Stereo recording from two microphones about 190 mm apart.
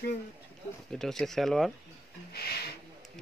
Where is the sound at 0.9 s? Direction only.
Centre (ahead or behind).